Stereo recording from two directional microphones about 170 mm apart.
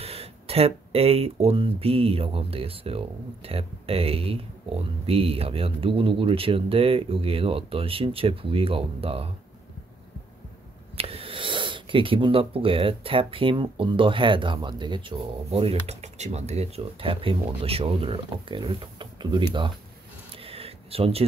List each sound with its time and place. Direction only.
0.0 s speech: 35° right (ahead or behind)
11.0 s speech: 35° right (ahead or behind)
20.3 s a sound: 35° right (ahead or behind)